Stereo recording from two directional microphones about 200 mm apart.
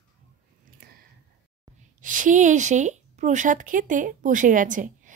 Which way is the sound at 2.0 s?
40° right (ahead or behind).